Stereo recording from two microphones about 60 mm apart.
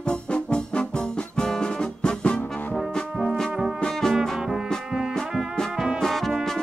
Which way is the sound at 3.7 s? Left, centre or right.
Centre.